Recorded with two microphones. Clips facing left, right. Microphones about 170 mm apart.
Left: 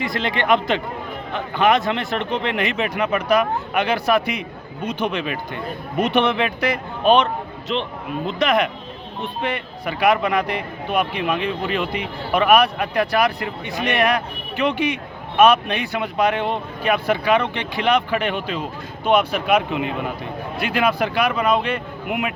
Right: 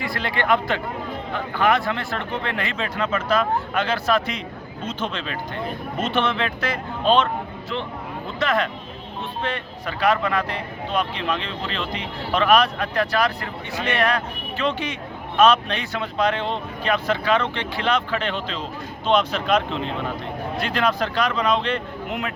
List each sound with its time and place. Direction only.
0.0 s speech: 20° left (ahead or behind)